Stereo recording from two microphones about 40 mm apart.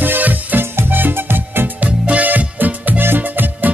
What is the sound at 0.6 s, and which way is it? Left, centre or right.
Music, right.